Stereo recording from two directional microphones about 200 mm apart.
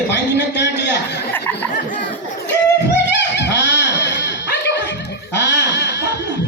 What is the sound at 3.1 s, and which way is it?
Music, 60° left (ahead or behind).